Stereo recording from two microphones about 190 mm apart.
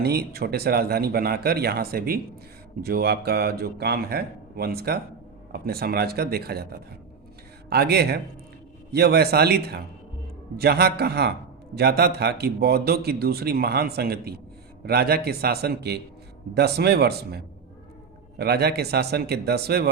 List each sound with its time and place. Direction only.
0.0 s a man's voice: 55° right (ahead or behind)